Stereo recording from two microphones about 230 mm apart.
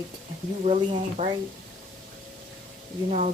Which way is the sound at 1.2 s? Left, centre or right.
Right.